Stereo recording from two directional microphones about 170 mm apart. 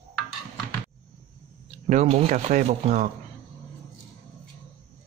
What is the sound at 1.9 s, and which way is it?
Speech, 40° right (ahead or behind).